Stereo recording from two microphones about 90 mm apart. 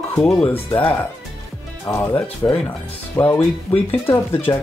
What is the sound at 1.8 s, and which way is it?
Speech, 30° left (ahead or behind).